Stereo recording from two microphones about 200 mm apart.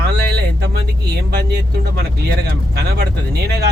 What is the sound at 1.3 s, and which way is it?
Speech, 55° right (ahead or behind).